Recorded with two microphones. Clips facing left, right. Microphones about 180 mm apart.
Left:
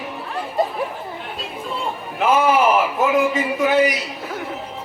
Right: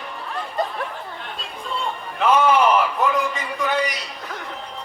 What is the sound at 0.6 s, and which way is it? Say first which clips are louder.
Chatter: left 4 dB; centre (ahead or behind).